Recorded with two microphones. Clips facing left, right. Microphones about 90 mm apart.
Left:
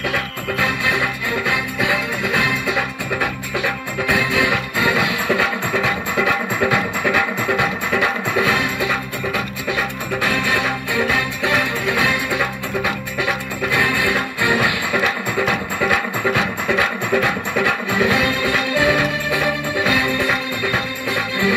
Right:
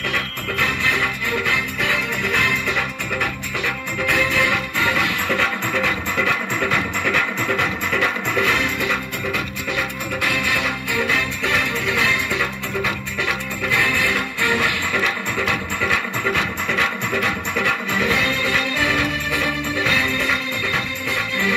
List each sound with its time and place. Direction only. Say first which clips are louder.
0.6 s music: left 1 dB; 15° left (ahead or behind)
16.3 s music: left 3 dB; 15° left (ahead or behind)